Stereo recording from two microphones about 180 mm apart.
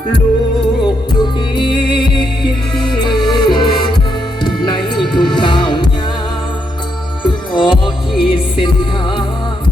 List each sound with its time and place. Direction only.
2.7 s music: 25° left (ahead or behind)
7.3 s music: 25° left (ahead or behind)